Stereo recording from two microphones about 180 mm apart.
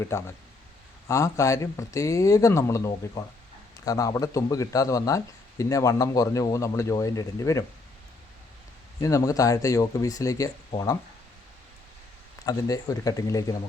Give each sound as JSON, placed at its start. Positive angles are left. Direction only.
{"t": 0.1, "sound": "speech", "side_deg": 15}
{"t": 9.0, "sound": "speech", "side_deg": 15}
{"t": 12.5, "sound": "speech", "side_deg": 20}